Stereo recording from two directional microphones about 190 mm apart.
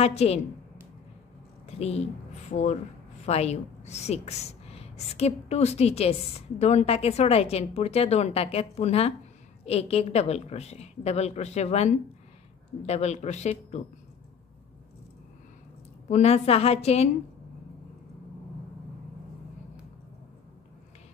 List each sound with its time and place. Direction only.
0.0 s a woman's voice: 35° left (ahead or behind)
1.7 s a woman's voice: 35° left (ahead or behind)
16.1 s a woman's voice: 35° left (ahead or behind)